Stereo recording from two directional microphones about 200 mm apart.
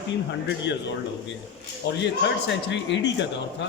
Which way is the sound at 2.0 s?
65° left (ahead or behind).